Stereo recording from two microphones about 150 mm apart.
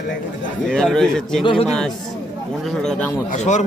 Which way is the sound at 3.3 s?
50° left (ahead or behind).